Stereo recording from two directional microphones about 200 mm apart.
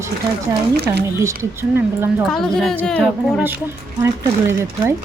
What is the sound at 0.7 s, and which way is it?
Speech, 55° right (ahead or behind).